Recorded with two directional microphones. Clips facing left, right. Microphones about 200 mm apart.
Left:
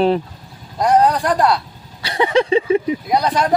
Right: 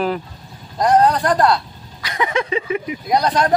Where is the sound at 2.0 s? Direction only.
30° left (ahead or behind).